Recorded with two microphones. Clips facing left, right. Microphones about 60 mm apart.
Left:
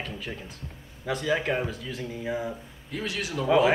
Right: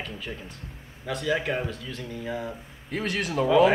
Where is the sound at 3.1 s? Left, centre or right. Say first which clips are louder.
Right 4 dB; right.